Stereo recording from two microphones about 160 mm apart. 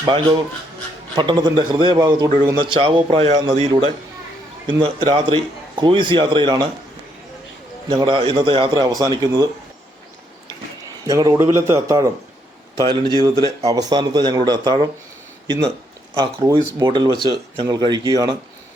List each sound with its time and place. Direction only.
0.0 s a man's voice: 25° right (ahead or behind)
7.9 s a man's voice: 30° right (ahead or behind)
11.0 s a man's voice: 20° right (ahead or behind)
16.5 s a man's voice: 25° right (ahead or behind)